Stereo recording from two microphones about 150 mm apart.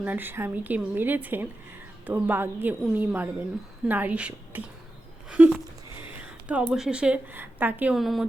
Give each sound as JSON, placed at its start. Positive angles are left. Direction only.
{"t": 0.0, "sound": "a woman's voice", "side_deg": -10}
{"t": 7.9, "sound": "a woman's voice", "side_deg": 0}